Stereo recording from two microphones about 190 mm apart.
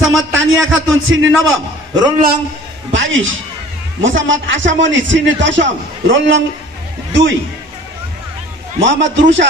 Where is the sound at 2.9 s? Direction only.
80° right.